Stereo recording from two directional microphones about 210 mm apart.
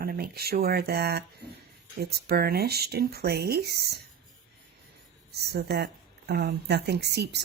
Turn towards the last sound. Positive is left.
turn(degrees=-55)  # may be behind; listen again after turning